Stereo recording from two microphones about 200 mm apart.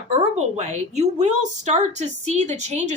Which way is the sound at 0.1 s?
35° right (ahead or behind).